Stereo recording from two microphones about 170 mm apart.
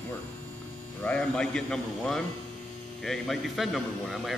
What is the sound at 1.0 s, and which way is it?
A man's voice, 5° left (ahead or behind).